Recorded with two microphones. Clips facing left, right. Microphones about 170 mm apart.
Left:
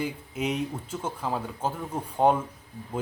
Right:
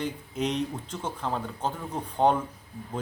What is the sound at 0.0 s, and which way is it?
Speech, 10° left (ahead or behind).